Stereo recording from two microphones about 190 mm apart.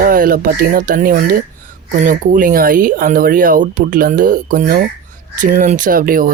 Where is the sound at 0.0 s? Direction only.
50° right (ahead or behind).